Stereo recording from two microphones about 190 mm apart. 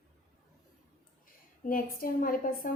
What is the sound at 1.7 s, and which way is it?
A woman's voice, 45° left (ahead or behind).